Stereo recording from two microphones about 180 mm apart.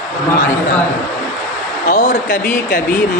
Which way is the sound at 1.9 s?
50° left (ahead or behind).